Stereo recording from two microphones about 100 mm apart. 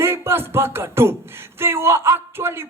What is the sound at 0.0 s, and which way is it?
Music, 25° right (ahead or behind).